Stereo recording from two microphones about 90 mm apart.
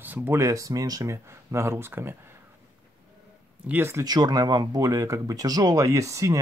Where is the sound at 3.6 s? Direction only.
25° right (ahead or behind).